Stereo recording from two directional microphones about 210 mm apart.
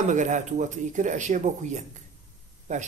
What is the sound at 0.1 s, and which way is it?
A man's voice, 35° right (ahead or behind).